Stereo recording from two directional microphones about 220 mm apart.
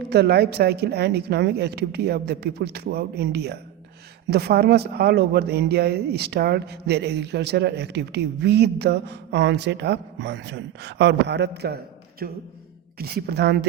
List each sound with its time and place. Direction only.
0.1 s speech: 50° right (ahead or behind)